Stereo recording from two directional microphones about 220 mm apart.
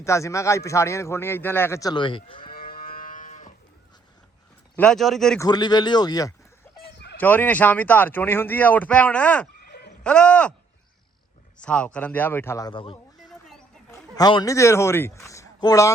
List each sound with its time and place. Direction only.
0.0 s a man's voice: 15° left (ahead or behind)
2.5 s moo: 40° left (ahead or behind)
4.8 s speech: centre (ahead or behind)
5.4 s speech: 20° left (ahead or behind)
6.7 s chicken: 10° left (ahead or behind)
7.2 s a man's voice: 10° left (ahead or behind)
11.6 s a man's voice: 5° left (ahead or behind); by 13.0 s 25° left (ahead or behind)
13.1 s a sound: centre (ahead or behind)
13.9 s a man's voice: 20° left (ahead or behind)